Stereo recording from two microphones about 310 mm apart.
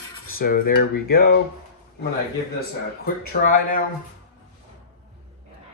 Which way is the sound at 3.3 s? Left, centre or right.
Left.